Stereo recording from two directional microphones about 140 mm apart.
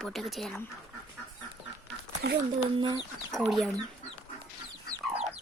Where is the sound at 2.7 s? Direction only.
30° right (ahead or behind).